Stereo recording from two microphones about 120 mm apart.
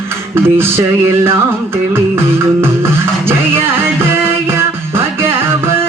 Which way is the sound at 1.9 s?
20° right (ahead or behind).